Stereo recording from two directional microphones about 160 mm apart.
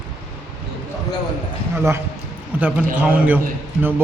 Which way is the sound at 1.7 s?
15° right (ahead or behind).